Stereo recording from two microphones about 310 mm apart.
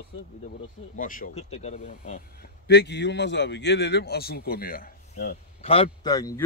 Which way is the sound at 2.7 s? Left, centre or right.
Left.